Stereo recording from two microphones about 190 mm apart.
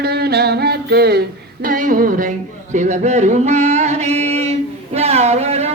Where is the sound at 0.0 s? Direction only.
55° right (ahead or behind).